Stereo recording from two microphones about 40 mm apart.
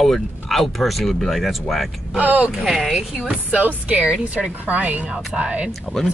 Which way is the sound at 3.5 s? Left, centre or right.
Right.